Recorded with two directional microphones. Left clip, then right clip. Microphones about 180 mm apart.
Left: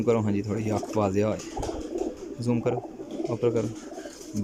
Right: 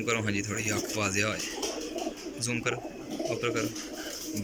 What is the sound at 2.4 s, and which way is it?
Speech, 40° left (ahead or behind).